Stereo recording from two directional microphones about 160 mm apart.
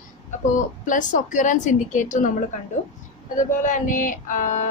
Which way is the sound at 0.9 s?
55° left (ahead or behind).